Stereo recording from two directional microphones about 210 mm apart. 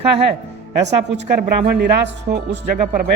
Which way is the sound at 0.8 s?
55° right (ahead or behind).